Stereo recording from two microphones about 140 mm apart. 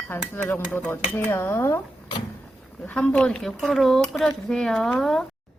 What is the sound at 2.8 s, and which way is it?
A man's voice, 10° left (ahead or behind).